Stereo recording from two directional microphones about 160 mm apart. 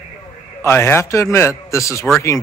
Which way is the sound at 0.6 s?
15° left (ahead or behind).